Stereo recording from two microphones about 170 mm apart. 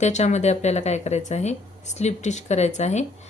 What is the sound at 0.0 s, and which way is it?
Speech, 40° left (ahead or behind).